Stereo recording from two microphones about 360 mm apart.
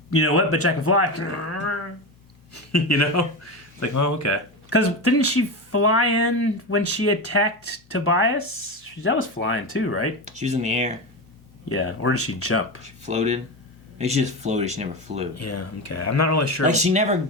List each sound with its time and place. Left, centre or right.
0.1 s speech: left
10.2 s speech: centre
11.7 s speech: left
12.8 s speech: centre
15.4 s speech: left
16.6 s speech: centre